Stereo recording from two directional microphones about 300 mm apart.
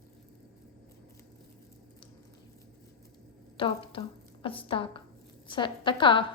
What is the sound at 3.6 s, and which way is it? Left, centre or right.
A woman's voice, centre.